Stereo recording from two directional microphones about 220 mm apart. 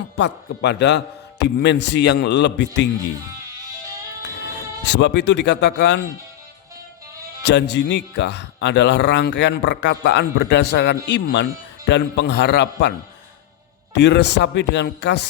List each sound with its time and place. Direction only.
0.2 s speech: 50° left (ahead or behind)
4.9 s speech: 50° left (ahead or behind)
7.4 s speech: 50° left (ahead or behind)
13.9 s speech: 50° left (ahead or behind)